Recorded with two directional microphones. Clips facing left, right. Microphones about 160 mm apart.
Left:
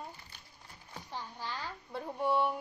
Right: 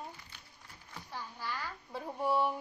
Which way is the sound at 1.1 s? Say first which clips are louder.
Even; 20° left (ahead or behind).